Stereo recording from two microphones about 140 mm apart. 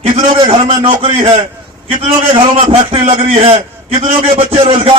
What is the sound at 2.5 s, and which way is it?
A man's voice, 40° right (ahead or behind).